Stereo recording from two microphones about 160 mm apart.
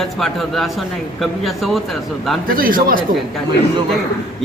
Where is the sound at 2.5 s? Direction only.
60° right (ahead or behind).